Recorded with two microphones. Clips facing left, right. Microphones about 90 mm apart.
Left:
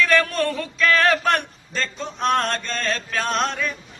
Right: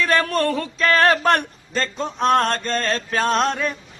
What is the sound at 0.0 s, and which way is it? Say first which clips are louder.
A man's voice: even; 35° right (ahead or behind).